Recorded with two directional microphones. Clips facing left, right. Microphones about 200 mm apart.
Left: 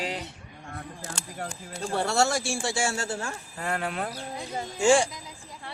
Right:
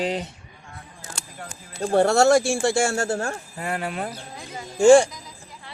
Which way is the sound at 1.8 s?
50° right (ahead or behind).